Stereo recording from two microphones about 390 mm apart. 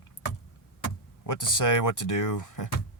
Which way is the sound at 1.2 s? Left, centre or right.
Left.